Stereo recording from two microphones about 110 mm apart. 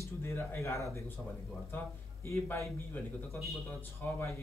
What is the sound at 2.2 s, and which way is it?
Speech, 25° left (ahead or behind).